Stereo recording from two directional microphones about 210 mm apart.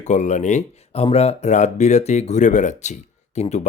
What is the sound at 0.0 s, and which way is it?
Speech, 35° left (ahead or behind).